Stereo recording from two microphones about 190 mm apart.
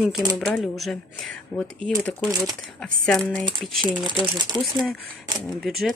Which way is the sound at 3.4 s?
25° right (ahead or behind).